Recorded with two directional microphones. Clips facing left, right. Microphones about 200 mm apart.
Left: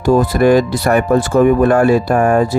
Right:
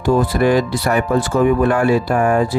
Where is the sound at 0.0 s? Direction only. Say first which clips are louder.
Left 4 dB; 40° left (ahead or behind).